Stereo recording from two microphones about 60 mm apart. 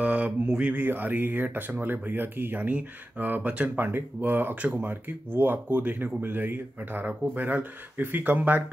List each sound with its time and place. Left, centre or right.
0.0 s mantra: right
0.7 s speech: right